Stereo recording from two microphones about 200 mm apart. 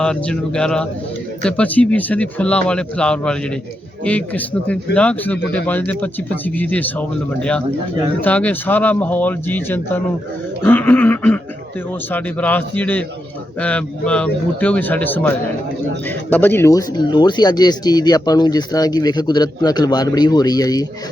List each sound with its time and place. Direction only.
0.0 s speech: 5° left (ahead or behind)
8.2 s speech: 5° left (ahead or behind)